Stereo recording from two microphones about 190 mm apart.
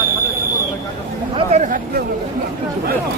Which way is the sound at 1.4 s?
35° right (ahead or behind).